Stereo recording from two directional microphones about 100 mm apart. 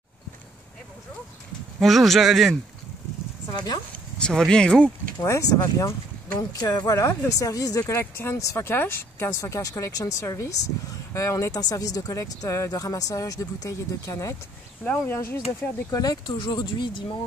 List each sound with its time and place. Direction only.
1.8 s speech: centre (ahead or behind)
3.5 s speech: 45° left (ahead or behind)
4.2 s speech: 5° left (ahead or behind)
5.2 s speech: 30° left (ahead or behind)
6.6 s speech: 40° left (ahead or behind)
7.9 s speech: 20° left (ahead or behind)
14.9 s speech: 20° left (ahead or behind)
15.9 s speech: 40° left (ahead or behind)
16.3 s speech: 55° left (ahead or behind)